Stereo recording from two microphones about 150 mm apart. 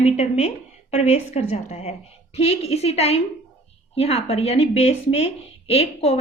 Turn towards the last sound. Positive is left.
turn(degrees=45)  # may be behind; listen again after turning